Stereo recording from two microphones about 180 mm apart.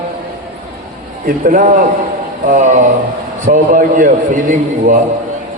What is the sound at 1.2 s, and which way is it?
A man's voice, 50° right (ahead or behind).